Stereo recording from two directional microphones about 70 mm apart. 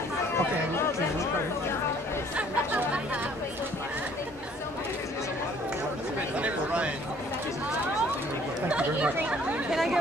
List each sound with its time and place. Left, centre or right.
2.3 s chatter: centre
6.4 s a sound: centre
8.6 s chatter: centre